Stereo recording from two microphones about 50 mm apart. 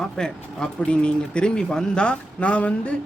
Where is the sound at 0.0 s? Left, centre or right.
Centre.